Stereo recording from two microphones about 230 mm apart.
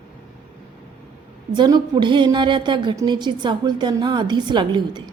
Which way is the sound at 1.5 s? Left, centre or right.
Centre.